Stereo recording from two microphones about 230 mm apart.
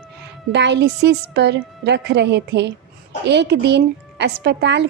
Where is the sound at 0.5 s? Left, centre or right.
Right.